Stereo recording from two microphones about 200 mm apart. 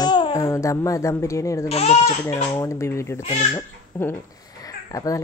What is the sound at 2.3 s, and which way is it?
Speech, 15° left (ahead or behind).